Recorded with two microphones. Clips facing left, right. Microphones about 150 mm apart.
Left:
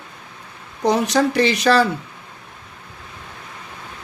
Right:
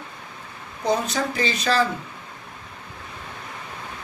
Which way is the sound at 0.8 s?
80° left.